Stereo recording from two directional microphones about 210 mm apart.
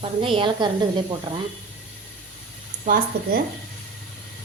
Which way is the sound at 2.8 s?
40° right (ahead or behind).